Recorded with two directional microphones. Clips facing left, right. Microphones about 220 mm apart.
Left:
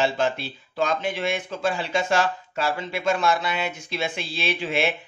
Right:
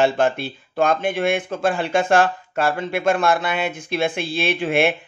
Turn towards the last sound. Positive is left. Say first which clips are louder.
# right 6 dB
turn(degrees=-55)  # may be behind; listen again after turning